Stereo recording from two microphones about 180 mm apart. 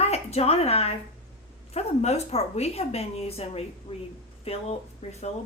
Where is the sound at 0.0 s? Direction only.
35° left (ahead or behind).